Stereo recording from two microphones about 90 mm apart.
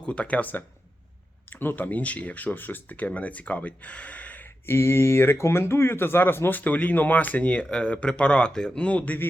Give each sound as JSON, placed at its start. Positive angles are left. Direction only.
{"t": 0.0, "sound": "speech", "side_deg": 15}